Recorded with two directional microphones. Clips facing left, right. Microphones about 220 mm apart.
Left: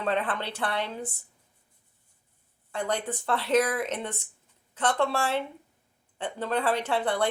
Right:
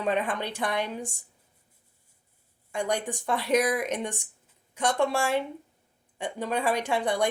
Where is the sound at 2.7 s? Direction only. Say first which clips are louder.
Right 1 dB; 15° right (ahead or behind).